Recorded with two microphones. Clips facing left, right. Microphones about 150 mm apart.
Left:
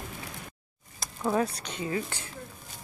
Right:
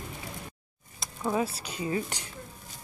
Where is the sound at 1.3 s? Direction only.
5° right (ahead or behind).